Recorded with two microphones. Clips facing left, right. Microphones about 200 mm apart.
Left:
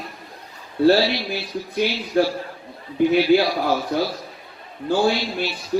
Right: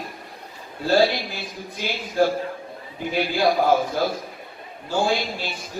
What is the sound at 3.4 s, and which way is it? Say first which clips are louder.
Speech: right 3 dB; 50° right (ahead or behind).